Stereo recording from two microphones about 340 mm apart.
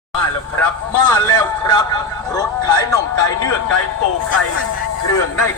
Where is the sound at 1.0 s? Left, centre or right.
Centre.